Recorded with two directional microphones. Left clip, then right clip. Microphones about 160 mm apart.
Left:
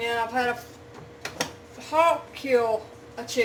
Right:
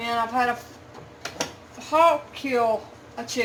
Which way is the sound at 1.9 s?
15° right (ahead or behind).